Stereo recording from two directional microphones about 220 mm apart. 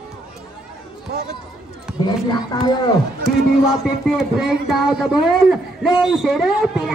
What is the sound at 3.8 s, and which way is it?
Speech, 5° right (ahead or behind).